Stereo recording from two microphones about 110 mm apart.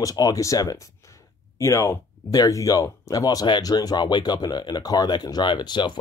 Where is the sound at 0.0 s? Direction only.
35° left (ahead or behind).